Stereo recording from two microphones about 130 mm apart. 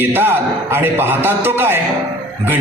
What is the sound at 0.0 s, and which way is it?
A man's voice, 15° right (ahead or behind).